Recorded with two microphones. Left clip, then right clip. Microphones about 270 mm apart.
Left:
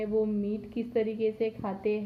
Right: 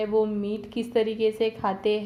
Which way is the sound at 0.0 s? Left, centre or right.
Centre.